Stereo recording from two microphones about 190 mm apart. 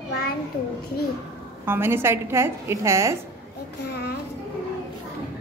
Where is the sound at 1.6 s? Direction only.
10° right (ahead or behind).